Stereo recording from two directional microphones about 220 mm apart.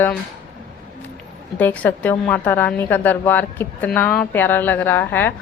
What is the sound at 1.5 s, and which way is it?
A woman's voice, 5° left (ahead or behind).